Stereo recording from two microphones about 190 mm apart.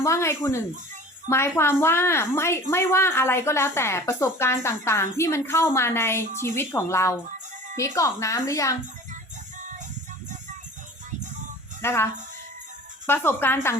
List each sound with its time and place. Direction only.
0.0 s a woman's voice: 15° left (ahead or behind)
11.8 s speech: 15° left (ahead or behind)
13.1 s a woman's voice: 10° left (ahead or behind)